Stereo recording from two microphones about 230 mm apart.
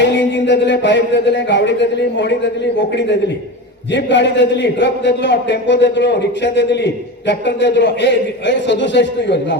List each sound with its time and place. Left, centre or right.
0.0 s a man's voice: left
3.9 s a man's voice: left